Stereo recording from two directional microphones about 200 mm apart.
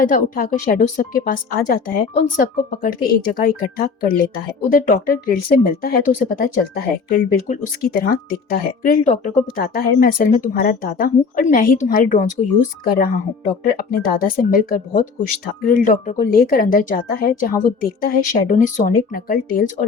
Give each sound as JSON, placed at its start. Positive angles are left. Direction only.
{"t": 0.0, "sound": "speech", "side_deg": 45}
{"t": 15.6, "sound": "speech", "side_deg": 40}